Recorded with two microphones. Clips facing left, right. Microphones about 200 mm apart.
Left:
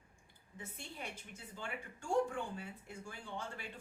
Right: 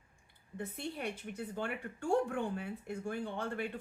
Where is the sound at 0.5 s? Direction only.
60° right (ahead or behind).